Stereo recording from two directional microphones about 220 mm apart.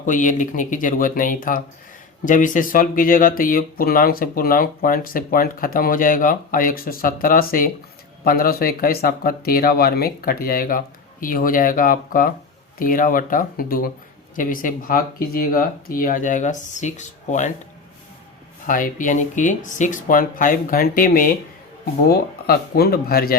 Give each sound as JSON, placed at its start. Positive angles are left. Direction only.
{"t": 0.0, "sound": "speech", "side_deg": 35}
{"t": 18.6, "sound": "speech", "side_deg": 40}